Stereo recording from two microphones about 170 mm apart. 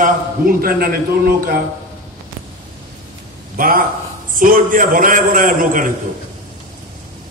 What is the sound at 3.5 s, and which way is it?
A man's voice, 55° right (ahead or behind).